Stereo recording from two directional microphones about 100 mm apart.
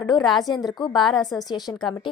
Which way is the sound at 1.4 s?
40° left (ahead or behind).